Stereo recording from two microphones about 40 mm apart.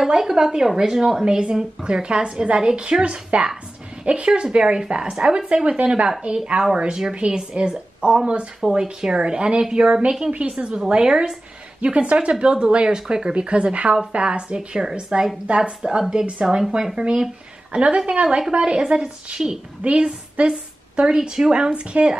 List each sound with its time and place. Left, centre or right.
0.0 s speech: centre
8.7 s a woman's voice: right